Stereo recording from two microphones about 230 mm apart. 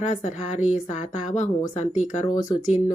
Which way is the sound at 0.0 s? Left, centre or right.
Left.